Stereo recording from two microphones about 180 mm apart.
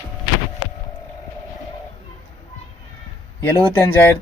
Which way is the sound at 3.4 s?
15° left (ahead or behind).